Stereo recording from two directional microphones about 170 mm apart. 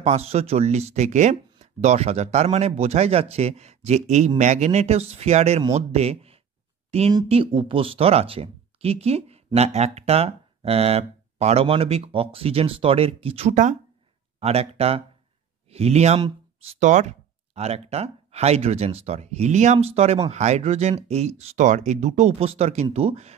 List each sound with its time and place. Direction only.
0.0 s speech: 40° right (ahead or behind)